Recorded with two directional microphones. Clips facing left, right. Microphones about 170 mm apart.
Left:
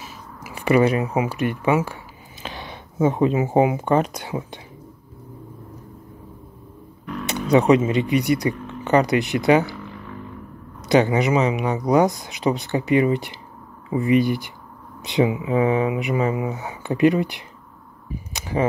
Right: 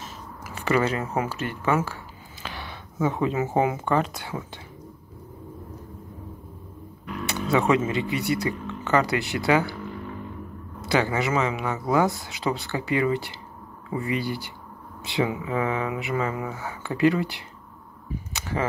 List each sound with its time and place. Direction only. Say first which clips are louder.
0.0 s speech: left 1 dB; 10° left (ahead or behind)
7.2 s speech: left 6 dB; 20° left (ahead or behind)
10.8 s speech: left 6 dB; 20° left (ahead or behind)
18.3 s a sound: left 6 dB; 15° left (ahead or behind)